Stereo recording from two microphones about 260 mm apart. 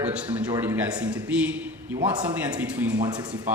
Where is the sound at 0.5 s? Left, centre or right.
Centre.